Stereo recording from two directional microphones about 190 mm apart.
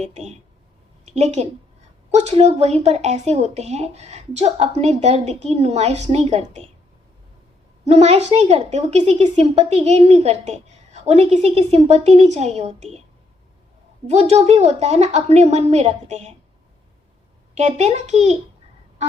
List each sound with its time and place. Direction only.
0.0 s a woman's voice: 35° right (ahead or behind)
7.9 s a woman's voice: 35° right (ahead or behind)
14.1 s a woman's voice: 35° right (ahead or behind)
17.7 s a woman's voice: 35° right (ahead or behind)